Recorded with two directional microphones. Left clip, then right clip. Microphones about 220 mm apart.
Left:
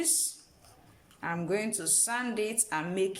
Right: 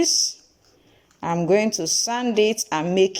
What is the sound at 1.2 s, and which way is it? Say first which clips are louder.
Speech: right 12 dB; 35° right (ahead or behind).